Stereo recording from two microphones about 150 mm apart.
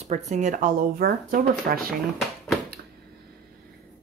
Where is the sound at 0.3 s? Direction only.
55° right (ahead or behind); by 1.8 s 80° right.